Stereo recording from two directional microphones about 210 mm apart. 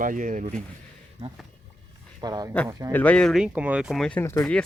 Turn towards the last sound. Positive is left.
turn(degrees=10)  # may be behind; listen again after turning